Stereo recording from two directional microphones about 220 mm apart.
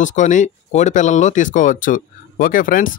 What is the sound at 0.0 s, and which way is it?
Speech, 35° left (ahead or behind).